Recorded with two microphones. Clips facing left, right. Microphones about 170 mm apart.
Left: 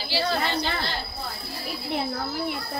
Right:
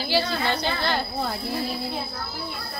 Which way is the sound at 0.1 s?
55° right (ahead or behind).